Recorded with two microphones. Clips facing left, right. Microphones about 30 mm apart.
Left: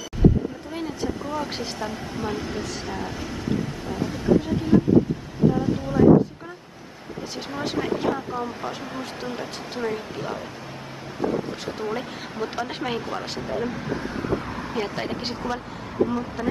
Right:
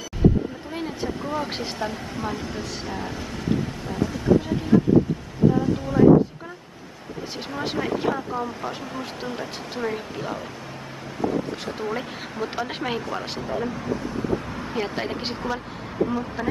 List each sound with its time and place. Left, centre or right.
1.3 s speech: centre
2.1 s speech: centre
7.5 s speech: centre
13.9 s vehicle: centre
14.6 s speech: centre